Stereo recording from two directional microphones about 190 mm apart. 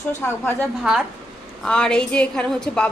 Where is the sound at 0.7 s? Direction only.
5° right (ahead or behind).